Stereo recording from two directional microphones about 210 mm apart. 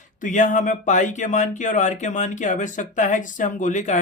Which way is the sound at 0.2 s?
35° left (ahead or behind).